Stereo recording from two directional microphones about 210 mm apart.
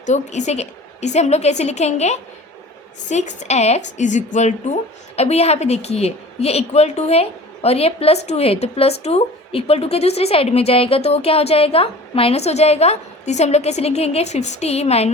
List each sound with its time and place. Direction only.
0.0 s a woman's voice: 35° left (ahead or behind)